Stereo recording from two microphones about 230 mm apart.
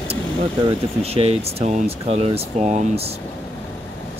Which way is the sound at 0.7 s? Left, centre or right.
Right.